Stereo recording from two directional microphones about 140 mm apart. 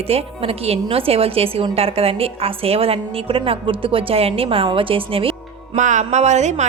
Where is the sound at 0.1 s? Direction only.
45° right (ahead or behind).